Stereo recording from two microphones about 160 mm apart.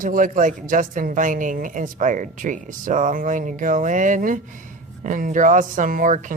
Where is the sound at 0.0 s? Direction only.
55° right (ahead or behind).